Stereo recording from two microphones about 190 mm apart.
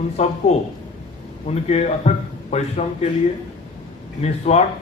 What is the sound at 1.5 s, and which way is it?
A man's voice, 35° left (ahead or behind).